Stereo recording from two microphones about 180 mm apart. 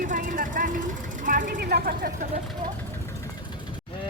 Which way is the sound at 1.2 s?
45° right (ahead or behind).